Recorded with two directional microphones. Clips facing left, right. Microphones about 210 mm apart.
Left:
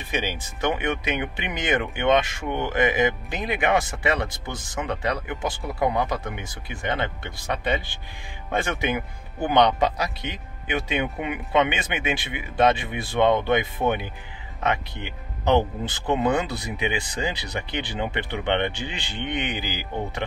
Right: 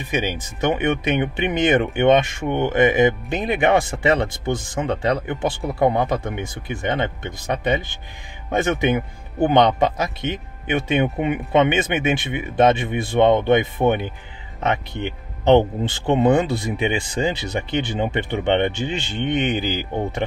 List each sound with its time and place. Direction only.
0.1 s speech: 15° right (ahead or behind)
15.4 s speech: 25° right (ahead or behind)